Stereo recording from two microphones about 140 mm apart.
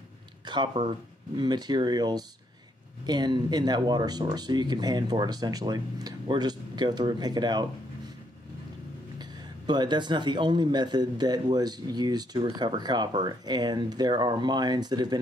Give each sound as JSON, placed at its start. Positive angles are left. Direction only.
{"t": 0.5, "sound": "a man's voice", "side_deg": -35}
{"t": 9.2, "sound": "a man's voice", "side_deg": -30}